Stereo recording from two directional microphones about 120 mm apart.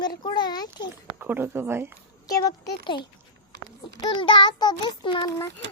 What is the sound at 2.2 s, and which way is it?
Speech, 30° left (ahead or behind).